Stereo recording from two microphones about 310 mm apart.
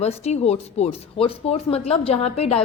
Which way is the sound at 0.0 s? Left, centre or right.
Centre.